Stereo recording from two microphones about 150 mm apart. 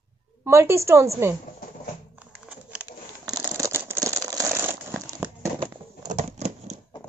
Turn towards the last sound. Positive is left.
turn(degrees=-50)  # may be behind; listen again after turning